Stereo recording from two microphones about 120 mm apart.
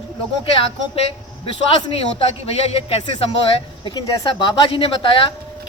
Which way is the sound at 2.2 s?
55° left (ahead or behind).